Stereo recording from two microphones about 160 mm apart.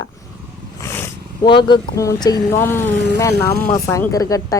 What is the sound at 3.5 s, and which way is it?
Speech, 70° left (ahead or behind).